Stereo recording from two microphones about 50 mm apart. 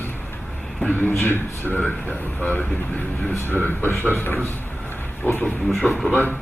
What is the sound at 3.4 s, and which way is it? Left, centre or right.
Speech, left.